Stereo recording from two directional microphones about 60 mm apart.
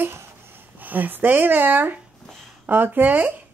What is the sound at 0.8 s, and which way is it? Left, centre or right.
A child's voice, right.